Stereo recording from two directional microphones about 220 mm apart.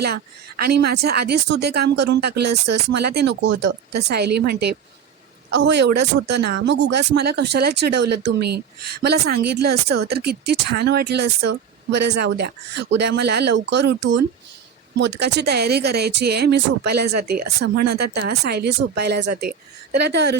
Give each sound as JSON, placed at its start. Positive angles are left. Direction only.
{"t": 0.0, "sound": "speech", "side_deg": -45}